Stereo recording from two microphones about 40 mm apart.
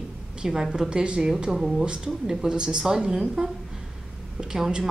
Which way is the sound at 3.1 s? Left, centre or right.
Centre.